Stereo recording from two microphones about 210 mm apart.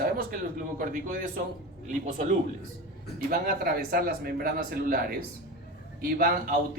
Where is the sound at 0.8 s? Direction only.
40° right (ahead or behind).